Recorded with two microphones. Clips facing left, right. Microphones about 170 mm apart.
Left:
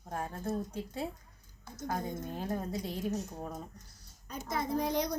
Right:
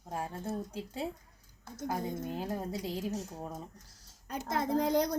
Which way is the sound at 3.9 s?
65° right (ahead or behind).